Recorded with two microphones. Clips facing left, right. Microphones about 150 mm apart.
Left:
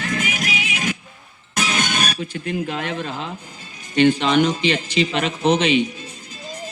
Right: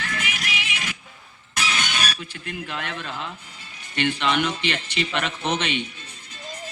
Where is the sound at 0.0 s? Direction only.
40° left (ahead or behind).